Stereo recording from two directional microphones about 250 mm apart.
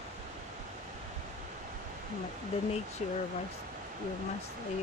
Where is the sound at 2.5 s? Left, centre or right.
Left.